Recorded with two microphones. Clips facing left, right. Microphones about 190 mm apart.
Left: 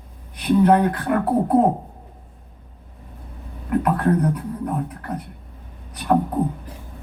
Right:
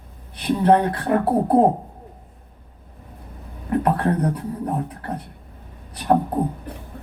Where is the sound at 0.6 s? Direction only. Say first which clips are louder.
Right 1 dB; 30° right (ahead or behind).